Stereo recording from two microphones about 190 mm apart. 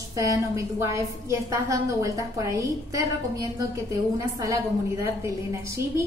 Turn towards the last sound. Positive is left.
turn(degrees=-15)  # may be behind; listen again after turning